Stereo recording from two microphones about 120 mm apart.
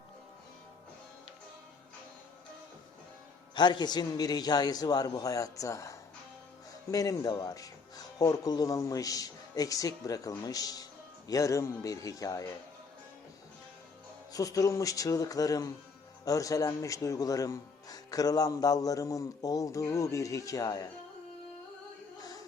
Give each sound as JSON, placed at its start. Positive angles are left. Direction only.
{"t": 3.5, "sound": "a man's voice", "side_deg": 40}
{"t": 14.3, "sound": "a man's voice", "side_deg": 30}
{"t": 22.2, "sound": "music", "side_deg": 30}